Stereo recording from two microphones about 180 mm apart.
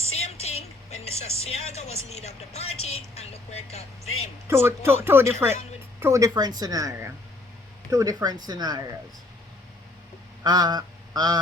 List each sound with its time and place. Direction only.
0.0 s music: 35° left (ahead or behind)
1.0 s speech: 35° left (ahead or behind)
4.4 s speech: 15° right (ahead or behind)
10.4 s duck: 20° right (ahead or behind)